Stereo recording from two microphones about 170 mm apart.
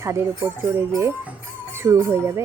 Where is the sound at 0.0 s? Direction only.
15° right (ahead or behind).